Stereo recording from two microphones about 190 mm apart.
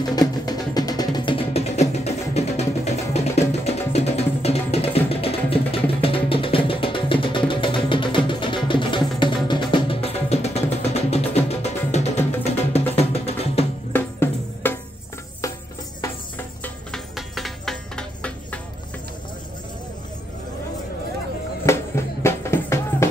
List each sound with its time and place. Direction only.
0.1 s music: 20° left (ahead or behind)
13.9 s music: 10° left (ahead or behind)
16.6 s music: centre (ahead or behind)
21.6 s music: 15° left (ahead or behind)